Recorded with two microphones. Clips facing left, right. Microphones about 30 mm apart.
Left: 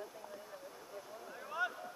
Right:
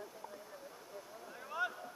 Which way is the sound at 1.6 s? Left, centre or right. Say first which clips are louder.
Even; centre.